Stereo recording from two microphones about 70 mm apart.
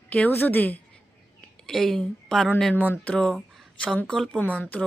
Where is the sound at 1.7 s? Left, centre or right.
Centre.